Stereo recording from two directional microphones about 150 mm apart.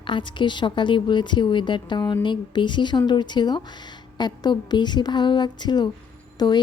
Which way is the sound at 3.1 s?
30° left (ahead or behind).